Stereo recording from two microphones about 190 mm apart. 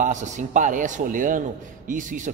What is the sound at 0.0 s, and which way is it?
A man's voice, 40° right (ahead or behind).